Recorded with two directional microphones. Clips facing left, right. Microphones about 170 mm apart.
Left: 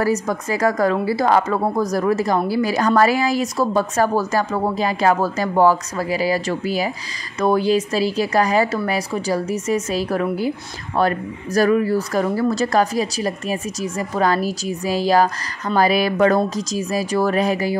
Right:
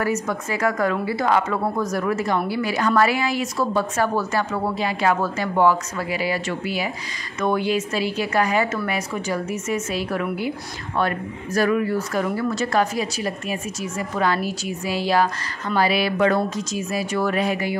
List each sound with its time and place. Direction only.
0.0 s a woman's voice: 35° left (ahead or behind)